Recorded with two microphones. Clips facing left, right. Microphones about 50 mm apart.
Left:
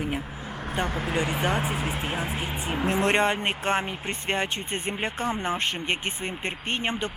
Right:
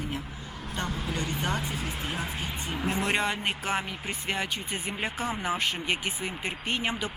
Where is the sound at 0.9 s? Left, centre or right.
Left.